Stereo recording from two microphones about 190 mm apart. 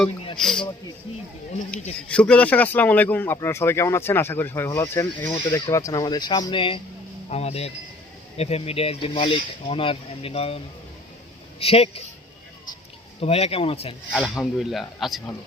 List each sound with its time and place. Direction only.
0.3 s speech: centre (ahead or behind)
2.0 s speech: 5° left (ahead or behind); by 10.6 s 30° left (ahead or behind)
11.6 s speech: 30° left (ahead or behind)
13.1 s speech: 30° left (ahead or behind)
14.1 s speech: centre (ahead or behind)